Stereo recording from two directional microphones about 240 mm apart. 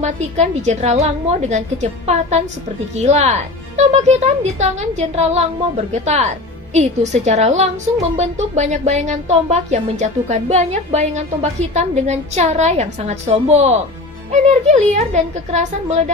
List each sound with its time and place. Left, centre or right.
0.0 s speech: right